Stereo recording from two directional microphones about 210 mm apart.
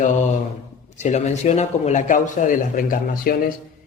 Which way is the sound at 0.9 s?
35° left (ahead or behind).